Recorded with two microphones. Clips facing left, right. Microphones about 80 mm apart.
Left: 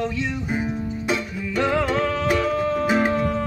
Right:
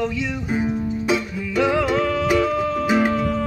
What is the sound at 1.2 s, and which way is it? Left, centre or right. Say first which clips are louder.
Music: right 1 dB; centre.